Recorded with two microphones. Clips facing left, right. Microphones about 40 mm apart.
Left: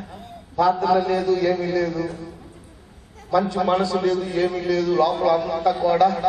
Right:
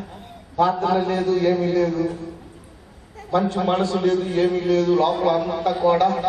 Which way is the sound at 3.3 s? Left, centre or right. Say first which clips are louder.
Left 1 dB; right.